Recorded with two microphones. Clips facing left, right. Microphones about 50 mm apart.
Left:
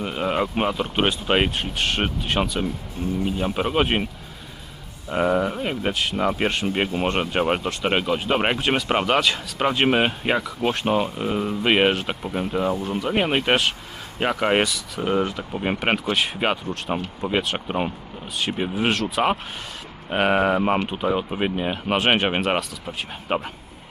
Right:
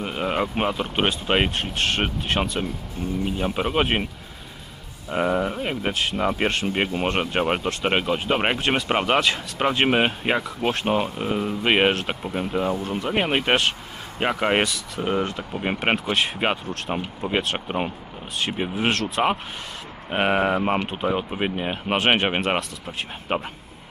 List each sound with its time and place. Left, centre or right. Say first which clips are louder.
0.0 s speech: left 1 dB; centre